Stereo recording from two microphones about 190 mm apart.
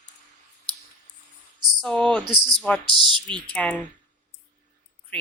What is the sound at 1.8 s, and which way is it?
A woman's voice, 5° left (ahead or behind).